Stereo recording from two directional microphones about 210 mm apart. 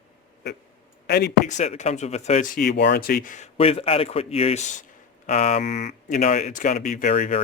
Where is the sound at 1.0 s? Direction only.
50° left (ahead or behind).